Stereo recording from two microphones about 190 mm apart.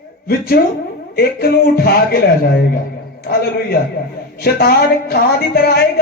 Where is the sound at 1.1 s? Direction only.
55° left (ahead or behind).